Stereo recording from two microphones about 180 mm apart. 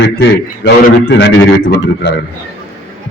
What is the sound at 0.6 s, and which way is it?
Speech, 70° left (ahead or behind).